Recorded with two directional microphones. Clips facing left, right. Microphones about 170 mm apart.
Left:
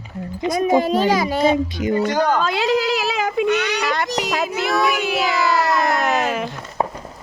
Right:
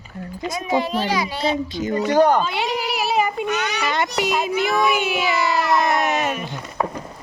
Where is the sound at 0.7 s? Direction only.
45° left (ahead or behind).